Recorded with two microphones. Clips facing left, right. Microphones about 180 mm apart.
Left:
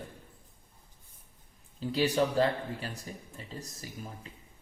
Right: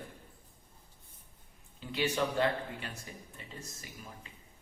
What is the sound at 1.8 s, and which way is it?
Speech, 35° left (ahead or behind).